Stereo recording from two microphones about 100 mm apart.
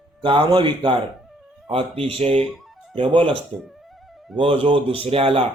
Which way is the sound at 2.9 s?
55° right (ahead or behind).